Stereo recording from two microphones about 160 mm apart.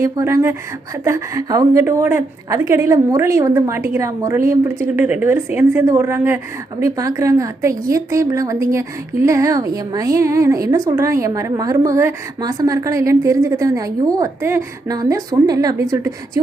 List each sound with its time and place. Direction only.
0.0 s a woman's voice: 20° right (ahead or behind)